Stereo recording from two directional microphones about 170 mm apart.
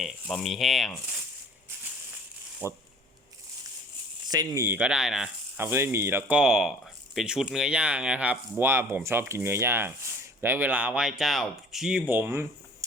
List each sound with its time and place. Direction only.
0.0 s speech: centre (ahead or behind)
2.6 s speech: 15° right (ahead or behind)
4.3 s speech: 20° right (ahead or behind)
4.8 s speech: 5° right (ahead or behind)
5.5 s speech: 15° right (ahead or behind)